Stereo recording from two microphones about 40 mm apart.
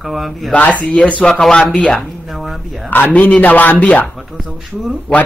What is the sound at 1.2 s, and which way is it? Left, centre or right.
Speech, centre.